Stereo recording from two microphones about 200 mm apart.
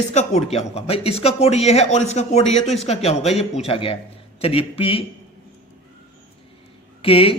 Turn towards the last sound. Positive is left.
turn(degrees=30)  # may be behind; listen again after turning